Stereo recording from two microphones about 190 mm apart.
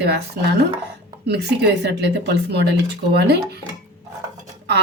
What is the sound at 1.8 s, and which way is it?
Speech, 60° right (ahead or behind).